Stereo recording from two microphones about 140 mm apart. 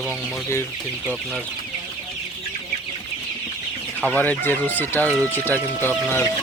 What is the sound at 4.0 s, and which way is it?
Speech, 10° left (ahead or behind).